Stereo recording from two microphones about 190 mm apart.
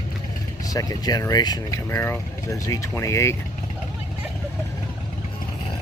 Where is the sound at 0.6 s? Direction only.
20° left (ahead or behind).